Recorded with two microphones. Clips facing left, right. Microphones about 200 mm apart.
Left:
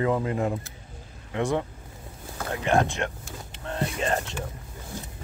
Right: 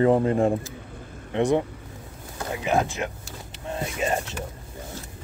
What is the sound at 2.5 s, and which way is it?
Speech, 5° right (ahead or behind).